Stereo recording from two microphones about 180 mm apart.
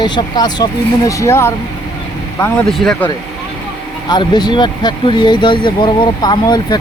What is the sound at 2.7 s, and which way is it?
Speech, 5° left (ahead or behind).